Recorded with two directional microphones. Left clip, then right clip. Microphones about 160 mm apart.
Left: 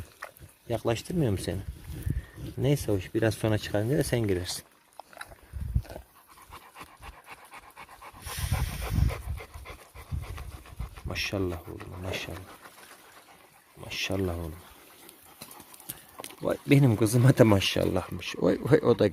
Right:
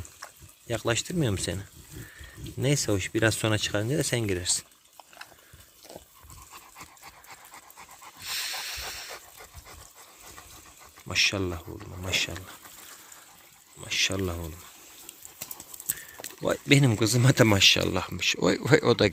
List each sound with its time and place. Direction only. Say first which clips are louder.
0.7 s speech: right 1 dB; 10° left (ahead or behind)
2.6 s speech: right 1 dB; 5° left (ahead or behind); by 4.6 s 20° left (ahead or behind)
6.5 s pant: left 1 dB; 10° left (ahead or behind)
11.1 s speech: right 6 dB; 10° left (ahead or behind)
13.8 s speech: right 4 dB; 10° left (ahead or behind)
16.4 s speech: right 2 dB; 10° left (ahead or behind)